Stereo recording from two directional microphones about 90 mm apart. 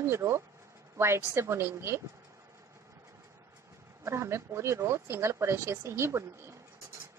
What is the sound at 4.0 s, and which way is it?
Speech, 30° right (ahead or behind).